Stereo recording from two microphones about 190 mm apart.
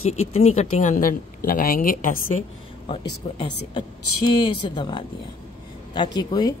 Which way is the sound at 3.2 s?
30° left (ahead or behind).